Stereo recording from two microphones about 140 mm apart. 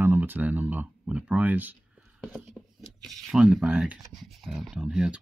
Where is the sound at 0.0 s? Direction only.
15° right (ahead or behind).